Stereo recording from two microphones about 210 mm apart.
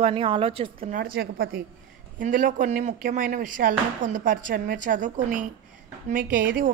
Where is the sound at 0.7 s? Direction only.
40° right (ahead or behind).